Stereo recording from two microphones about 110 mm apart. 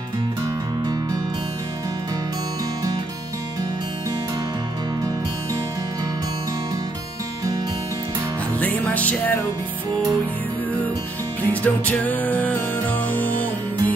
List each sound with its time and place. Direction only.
8.5 s music: 15° left (ahead or behind)
11.4 s music: 15° left (ahead or behind)